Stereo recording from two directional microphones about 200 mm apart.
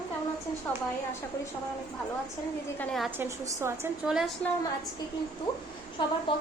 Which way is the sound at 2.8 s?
Centre (ahead or behind).